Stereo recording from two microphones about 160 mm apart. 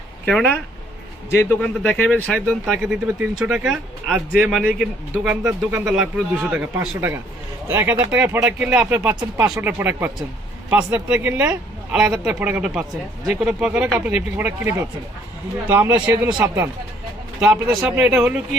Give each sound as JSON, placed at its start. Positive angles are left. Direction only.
{"t": 0.3, "sound": "speech", "side_deg": 5}
{"t": 1.3, "sound": "a man's voice", "side_deg": 15}
{"t": 17.7, "sound": "speech", "side_deg": -10}